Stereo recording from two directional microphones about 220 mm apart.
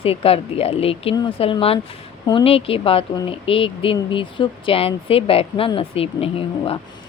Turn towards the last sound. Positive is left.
turn(degrees=25)  # may be behind; listen again after turning